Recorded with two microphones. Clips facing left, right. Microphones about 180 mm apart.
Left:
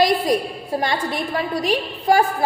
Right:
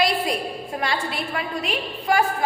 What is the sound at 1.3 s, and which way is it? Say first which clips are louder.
Speech: left 8 dB; 35° left (ahead or behind).